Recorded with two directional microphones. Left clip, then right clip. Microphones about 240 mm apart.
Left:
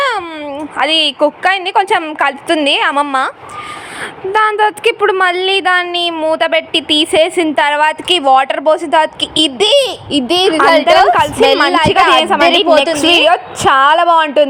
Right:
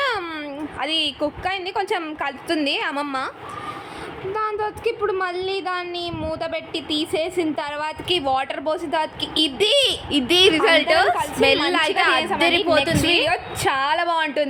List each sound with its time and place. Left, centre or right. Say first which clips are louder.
0.8 s a woman's voice: left 12 dB; centre
4.4 s a woman's voice: left 14 dB; left